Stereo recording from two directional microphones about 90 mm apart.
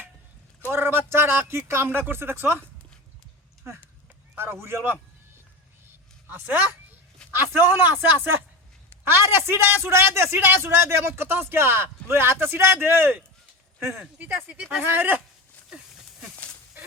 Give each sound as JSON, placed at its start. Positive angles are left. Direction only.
{"t": 0.7, "sound": "a man's voice", "side_deg": -25}
{"t": 4.4, "sound": "a man's voice", "side_deg": -25}
{"t": 6.2, "sound": "a woman's voice", "side_deg": -20}